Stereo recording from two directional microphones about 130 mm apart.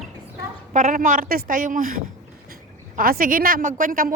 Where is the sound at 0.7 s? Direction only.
75° right (ahead or behind).